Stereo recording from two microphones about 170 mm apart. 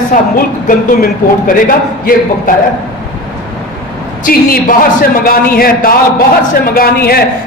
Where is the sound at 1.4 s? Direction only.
55° left (ahead or behind).